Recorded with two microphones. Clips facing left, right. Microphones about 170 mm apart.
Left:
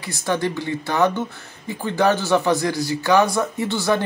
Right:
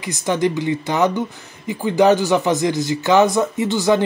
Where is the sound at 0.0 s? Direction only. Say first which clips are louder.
Right 4 dB; 15° right (ahead or behind).